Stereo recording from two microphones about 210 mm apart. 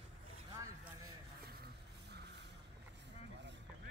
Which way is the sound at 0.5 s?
15° right (ahead or behind).